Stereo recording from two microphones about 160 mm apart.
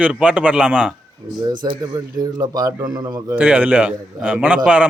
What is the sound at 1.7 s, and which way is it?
Speech, 25° right (ahead or behind).